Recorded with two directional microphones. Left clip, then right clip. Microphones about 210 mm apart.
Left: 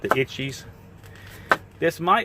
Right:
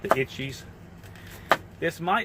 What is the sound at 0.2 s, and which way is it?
Speech, 65° left (ahead or behind).